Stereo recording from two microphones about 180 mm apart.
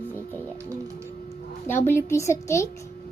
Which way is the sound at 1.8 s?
15° left (ahead or behind).